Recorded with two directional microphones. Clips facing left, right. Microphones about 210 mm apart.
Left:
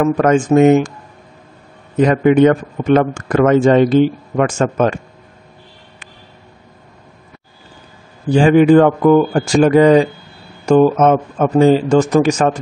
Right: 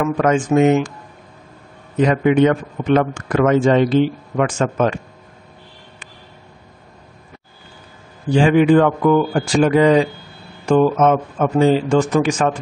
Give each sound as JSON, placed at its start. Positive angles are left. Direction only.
{"t": 0.0, "sound": "a man's voice", "side_deg": 45}
{"t": 2.0, "sound": "a man's voice", "side_deg": 45}
{"t": 8.3, "sound": "a man's voice", "side_deg": 40}